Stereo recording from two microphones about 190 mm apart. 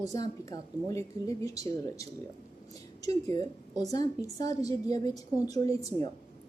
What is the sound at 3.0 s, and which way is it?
A woman's voice, 20° left (ahead or behind).